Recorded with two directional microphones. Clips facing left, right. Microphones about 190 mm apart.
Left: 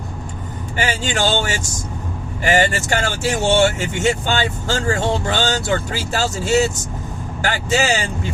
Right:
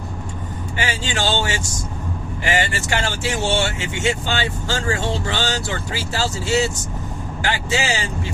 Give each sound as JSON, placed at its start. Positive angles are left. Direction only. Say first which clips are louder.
{"t": 0.8, "sound": "speech", "louder": "left 4 dB", "side_deg": 45}